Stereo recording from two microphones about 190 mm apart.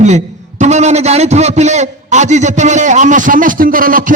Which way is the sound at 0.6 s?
35° right (ahead or behind).